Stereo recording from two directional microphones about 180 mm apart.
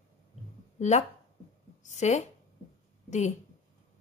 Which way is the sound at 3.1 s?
40° left (ahead or behind).